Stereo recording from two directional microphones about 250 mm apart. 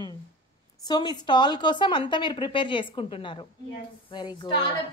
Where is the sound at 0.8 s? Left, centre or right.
Centre.